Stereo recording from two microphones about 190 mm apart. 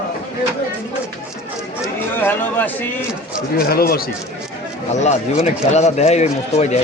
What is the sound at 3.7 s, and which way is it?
Speech, 55° left (ahead or behind).